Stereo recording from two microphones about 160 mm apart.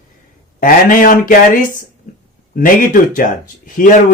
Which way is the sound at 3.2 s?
55° left (ahead or behind).